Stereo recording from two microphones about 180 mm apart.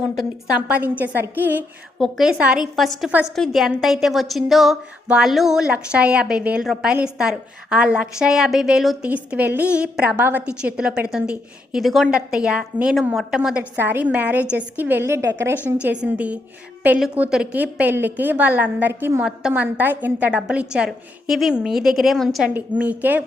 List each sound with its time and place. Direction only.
0.7 s a woman's voice: 10° right (ahead or behind)